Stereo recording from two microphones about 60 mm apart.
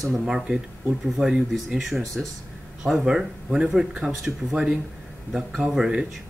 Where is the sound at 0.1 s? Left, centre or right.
Centre.